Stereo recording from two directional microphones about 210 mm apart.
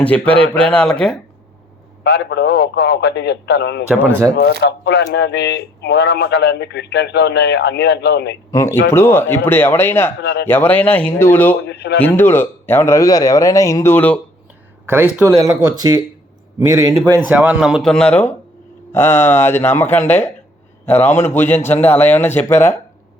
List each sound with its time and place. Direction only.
0.0 s speech: 5° left (ahead or behind)
2.0 s speech: 55° left (ahead or behind)
3.8 s speech: 5° right (ahead or behind)
4.6 s speech: 55° left (ahead or behind)
8.4 s speech: 15° left (ahead or behind)
10.2 s speech: 55° left (ahead or behind)
10.4 s speech: 10° left (ahead or behind)
11.7 s speech: 50° left (ahead or behind)
12.0 s speech: 10° left (ahead or behind)
15.1 s a man's voice: 15° right (ahead or behind); by 22.8 s 10° left (ahead or behind)